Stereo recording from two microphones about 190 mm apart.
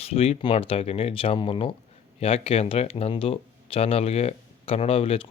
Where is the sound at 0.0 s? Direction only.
30° left (ahead or behind).